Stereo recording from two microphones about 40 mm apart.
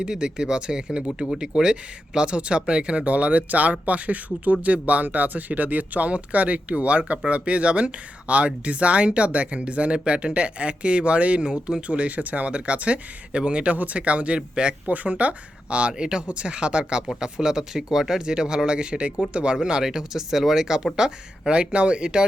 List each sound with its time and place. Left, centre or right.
0.0 s speech: right
12.5 s speech: right
14.8 s speech: right
19.5 s speech: centre